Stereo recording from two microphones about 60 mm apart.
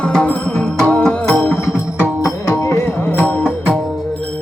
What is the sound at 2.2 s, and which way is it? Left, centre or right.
Music, left.